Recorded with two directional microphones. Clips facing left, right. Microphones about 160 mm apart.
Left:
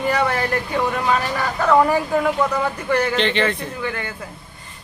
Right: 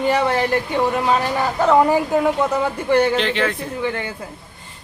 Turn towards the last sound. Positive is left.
turn(degrees=-25)  # may be behind; listen again after turning